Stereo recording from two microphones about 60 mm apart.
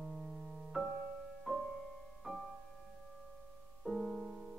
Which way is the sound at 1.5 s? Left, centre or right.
Centre.